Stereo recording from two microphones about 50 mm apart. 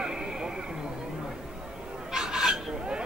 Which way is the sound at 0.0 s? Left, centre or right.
Centre.